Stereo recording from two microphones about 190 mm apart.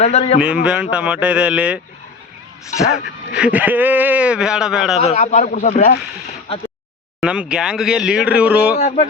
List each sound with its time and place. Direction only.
0.0 s speech: 35° left (ahead or behind)
0.4 s speech: 5° right (ahead or behind)
2.6 s speech: 15° left (ahead or behind)
2.9 s speech: 5° right (ahead or behind)
4.9 s speech: 35° left (ahead or behind)
7.2 s speech: 5° right (ahead or behind)